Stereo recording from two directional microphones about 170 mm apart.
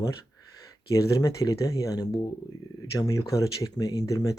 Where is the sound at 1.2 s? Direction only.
20° left (ahead or behind).